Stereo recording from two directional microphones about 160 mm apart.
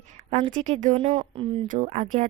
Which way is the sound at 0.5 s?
50° right (ahead or behind).